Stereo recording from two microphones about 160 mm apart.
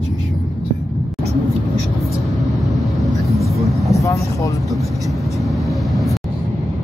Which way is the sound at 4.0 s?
20° left (ahead or behind).